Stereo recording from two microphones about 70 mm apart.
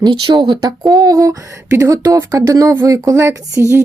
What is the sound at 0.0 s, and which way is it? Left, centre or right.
Speech, right.